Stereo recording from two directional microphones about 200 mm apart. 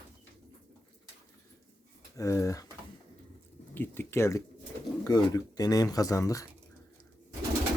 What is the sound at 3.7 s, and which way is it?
Speech, 10° left (ahead or behind).